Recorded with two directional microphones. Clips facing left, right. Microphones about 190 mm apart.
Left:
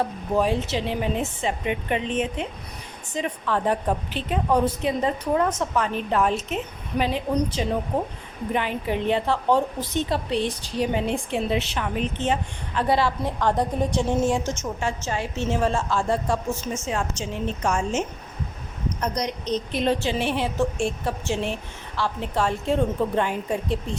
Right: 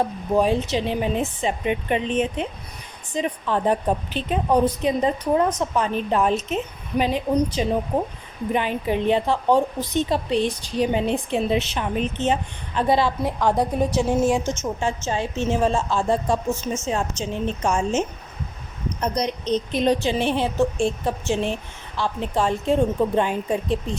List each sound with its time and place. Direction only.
0.3 s a woman's voice: 20° right (ahead or behind)